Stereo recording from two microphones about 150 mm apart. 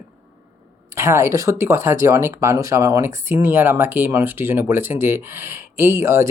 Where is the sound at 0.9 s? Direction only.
20° right (ahead or behind).